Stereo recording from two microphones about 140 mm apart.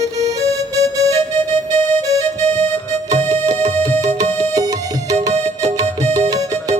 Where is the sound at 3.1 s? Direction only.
55° right (ahead or behind).